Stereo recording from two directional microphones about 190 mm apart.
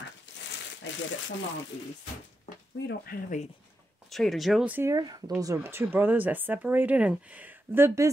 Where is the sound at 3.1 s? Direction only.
50° left (ahead or behind).